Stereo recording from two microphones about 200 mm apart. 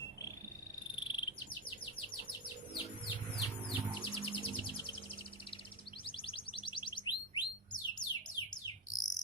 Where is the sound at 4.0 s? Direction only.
25° left (ahead or behind).